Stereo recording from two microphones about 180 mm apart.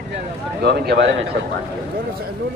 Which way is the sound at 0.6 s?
65° right (ahead or behind).